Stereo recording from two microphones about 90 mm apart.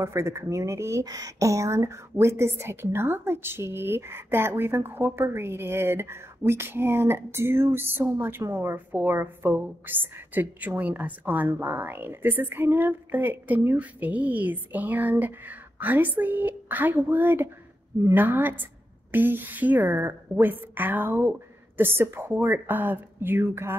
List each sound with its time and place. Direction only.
0.0 s speech: 30° right (ahead or behind)